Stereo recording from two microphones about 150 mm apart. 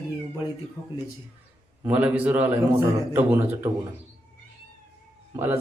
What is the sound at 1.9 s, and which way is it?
A man's voice, 10° right (ahead or behind).